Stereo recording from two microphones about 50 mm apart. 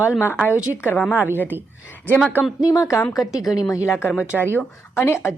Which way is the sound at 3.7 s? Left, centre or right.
Left.